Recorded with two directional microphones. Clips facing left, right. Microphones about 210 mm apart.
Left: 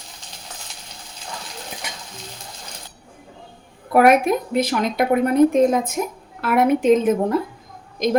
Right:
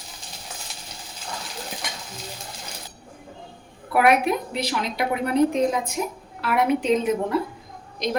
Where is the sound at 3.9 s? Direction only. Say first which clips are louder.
Left 5 dB; 45° left (ahead or behind).